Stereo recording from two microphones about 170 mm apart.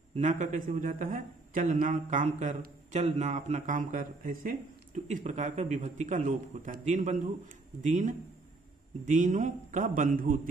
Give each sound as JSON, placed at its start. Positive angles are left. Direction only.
{"t": 0.1, "sound": "speech", "side_deg": -45}